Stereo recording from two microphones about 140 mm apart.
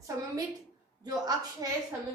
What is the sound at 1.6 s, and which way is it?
Speech, 25° right (ahead or behind).